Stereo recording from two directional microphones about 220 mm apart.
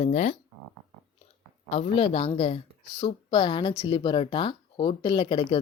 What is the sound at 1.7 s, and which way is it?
Speech, 25° left (ahead or behind).